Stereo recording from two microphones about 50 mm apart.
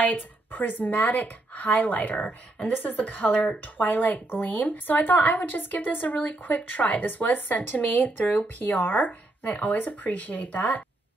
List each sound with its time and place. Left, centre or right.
0.0 s speech: left